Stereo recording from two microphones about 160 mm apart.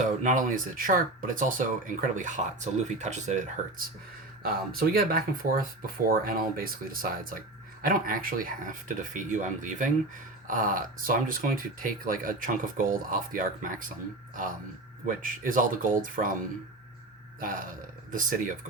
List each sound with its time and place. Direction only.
0.0 s speech: 50° right (ahead or behind)
4.4 s speech: 65° right (ahead or behind)
15.0 s speech: 55° right (ahead or behind)
17.4 s speech: 55° right (ahead or behind)